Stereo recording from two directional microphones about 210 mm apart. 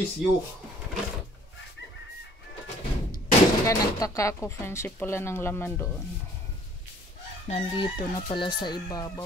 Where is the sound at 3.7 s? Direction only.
15° left (ahead or behind).